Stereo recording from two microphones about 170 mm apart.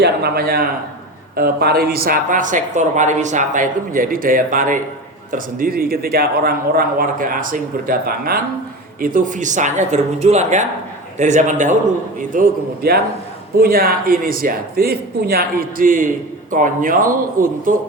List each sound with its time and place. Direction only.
0.0 s a man's voice: 65° right (ahead or behind); by 11.8 s 45° right (ahead or behind)
12.3 s a man's voice: 55° right (ahead or behind)